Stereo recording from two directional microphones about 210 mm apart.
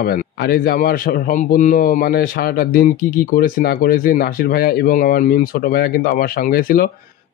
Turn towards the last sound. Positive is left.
turn(degrees=45)  # may be behind; listen again after turning